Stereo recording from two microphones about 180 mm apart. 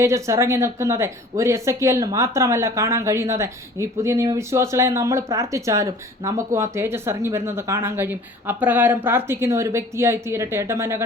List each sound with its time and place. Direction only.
0.0 s speech: 15° right (ahead or behind)